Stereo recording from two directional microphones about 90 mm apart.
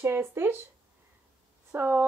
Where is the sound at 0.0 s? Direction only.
25° right (ahead or behind).